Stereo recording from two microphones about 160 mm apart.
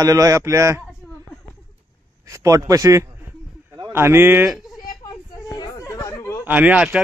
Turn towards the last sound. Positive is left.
turn(degrees=-5)  # may be behind; listen again after turning